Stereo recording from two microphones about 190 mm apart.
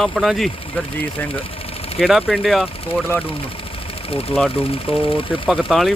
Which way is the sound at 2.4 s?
Centre (ahead or behind).